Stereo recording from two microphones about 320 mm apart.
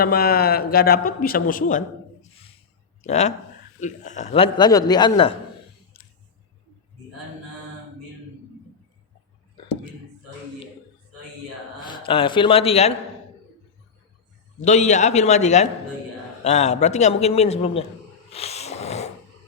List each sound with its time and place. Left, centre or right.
0.0 s a man's voice: left
3.1 s a man's voice: left
11.9 s a man's voice: centre
14.6 s a man's voice: left
18.3 s a sound: centre